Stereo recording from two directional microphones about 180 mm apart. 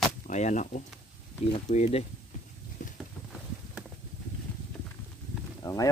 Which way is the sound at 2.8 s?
45° left (ahead or behind).